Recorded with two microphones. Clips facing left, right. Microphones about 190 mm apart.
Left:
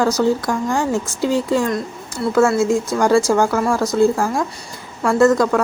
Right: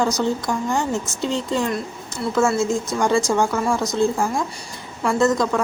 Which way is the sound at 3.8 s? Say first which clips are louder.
Left 5 dB; 15° right (ahead or behind).